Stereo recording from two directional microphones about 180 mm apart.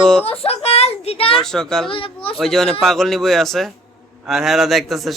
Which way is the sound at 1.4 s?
5° left (ahead or behind).